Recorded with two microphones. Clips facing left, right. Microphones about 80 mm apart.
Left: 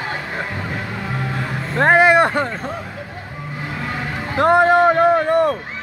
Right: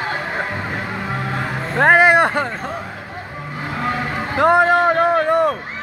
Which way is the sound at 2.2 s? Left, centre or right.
Centre.